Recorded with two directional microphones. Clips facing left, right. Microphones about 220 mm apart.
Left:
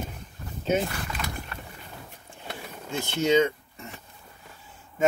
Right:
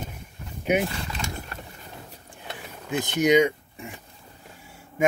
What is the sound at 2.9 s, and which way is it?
Speech, 15° right (ahead or behind).